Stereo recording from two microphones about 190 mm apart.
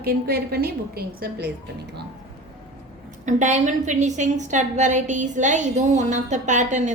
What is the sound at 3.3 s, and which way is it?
A woman's voice, 40° right (ahead or behind).